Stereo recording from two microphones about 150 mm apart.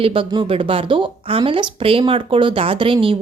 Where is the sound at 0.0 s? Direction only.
35° right (ahead or behind).